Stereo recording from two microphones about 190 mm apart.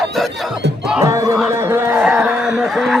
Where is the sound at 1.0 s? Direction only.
20° right (ahead or behind).